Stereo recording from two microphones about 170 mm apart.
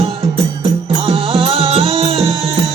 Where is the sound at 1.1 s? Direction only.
35° right (ahead or behind).